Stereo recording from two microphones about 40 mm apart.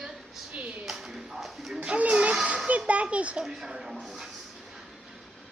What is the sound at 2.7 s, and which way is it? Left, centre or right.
Speech, right.